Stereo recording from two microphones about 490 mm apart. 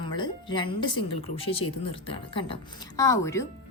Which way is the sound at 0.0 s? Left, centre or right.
Centre.